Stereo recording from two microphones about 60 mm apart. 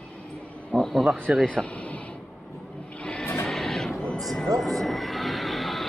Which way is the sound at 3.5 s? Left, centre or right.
Centre.